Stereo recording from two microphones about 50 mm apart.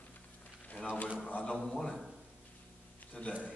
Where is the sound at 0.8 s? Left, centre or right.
Left.